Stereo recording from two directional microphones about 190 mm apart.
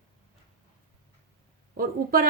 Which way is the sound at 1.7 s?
50° right (ahead or behind).